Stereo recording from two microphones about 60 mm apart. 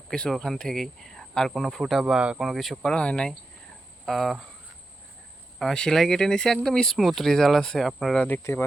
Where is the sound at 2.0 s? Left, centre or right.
Centre.